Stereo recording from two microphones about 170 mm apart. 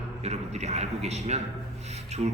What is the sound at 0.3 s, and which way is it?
A man's voice, 40° right (ahead or behind).